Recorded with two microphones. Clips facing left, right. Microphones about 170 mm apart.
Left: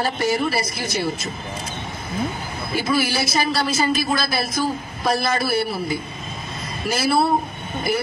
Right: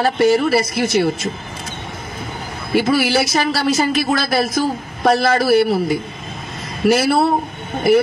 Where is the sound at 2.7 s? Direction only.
70° right (ahead or behind).